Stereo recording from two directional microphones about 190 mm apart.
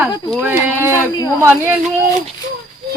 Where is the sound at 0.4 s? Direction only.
10° right (ahead or behind).